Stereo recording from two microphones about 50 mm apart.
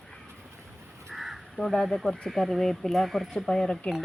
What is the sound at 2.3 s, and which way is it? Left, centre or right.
Speech, centre.